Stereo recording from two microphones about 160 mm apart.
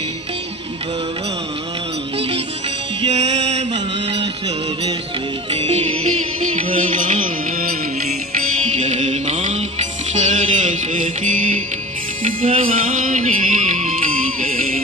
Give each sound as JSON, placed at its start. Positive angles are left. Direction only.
{"t": 3.1, "sound": "music", "side_deg": -45}
{"t": 5.5, "sound": "music", "side_deg": -40}
{"t": 8.7, "sound": "music", "side_deg": -45}